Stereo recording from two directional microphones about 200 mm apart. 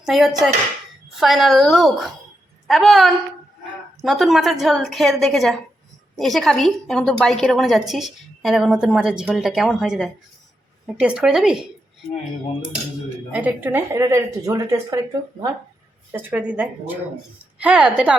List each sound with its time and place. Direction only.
0.0 s a woman's voice: centre (ahead or behind)
13.3 s a woman's voice: 10° right (ahead or behind)
16.1 s a woman's voice: 5° right (ahead or behind)